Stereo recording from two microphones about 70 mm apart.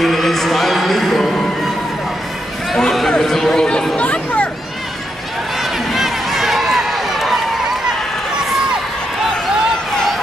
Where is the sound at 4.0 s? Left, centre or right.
Centre.